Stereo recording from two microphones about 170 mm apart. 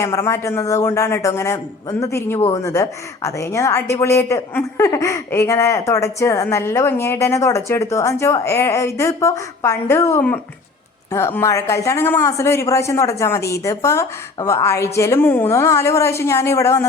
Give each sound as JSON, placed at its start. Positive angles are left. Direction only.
{"t": 0.0, "sound": "a woman's voice", "side_deg": 15}